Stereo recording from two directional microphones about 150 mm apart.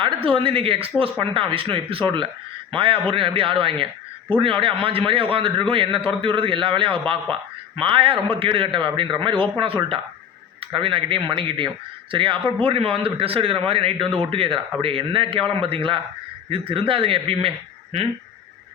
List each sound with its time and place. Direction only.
0.0 s speech: 35° right (ahead or behind)